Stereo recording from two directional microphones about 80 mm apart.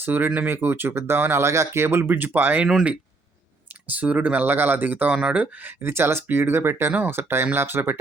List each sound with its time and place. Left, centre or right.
0.0 s speech: right
3.8 s speech: centre
5.1 s speech: centre
5.4 s speech: right